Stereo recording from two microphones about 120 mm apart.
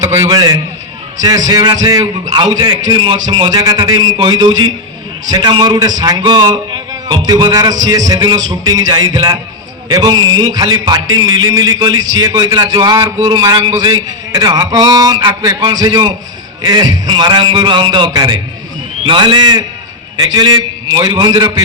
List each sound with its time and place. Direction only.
0.3 s a man's voice: 35° right (ahead or behind)
3.5 s a man's voice: 30° right (ahead or behind)